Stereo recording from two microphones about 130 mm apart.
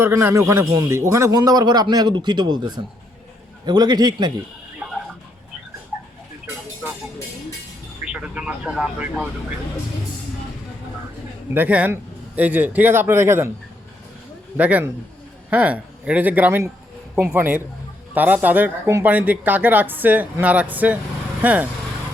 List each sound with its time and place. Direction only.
0.0 s a man's voice: 20° right (ahead or behind)
4.8 s a sound: 10° right (ahead or behind)
8.0 s speech: 5° right (ahead or behind)
11.5 s speech: 10° right (ahead or behind)
14.5 s speech: 10° right (ahead or behind)